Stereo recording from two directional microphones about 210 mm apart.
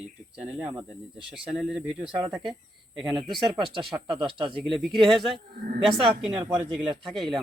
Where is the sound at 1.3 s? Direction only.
Centre (ahead or behind).